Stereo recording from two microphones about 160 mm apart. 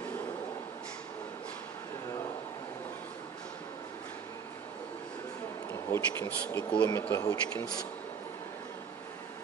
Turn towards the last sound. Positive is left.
turn(degrees=5)  # may be behind; listen again after turning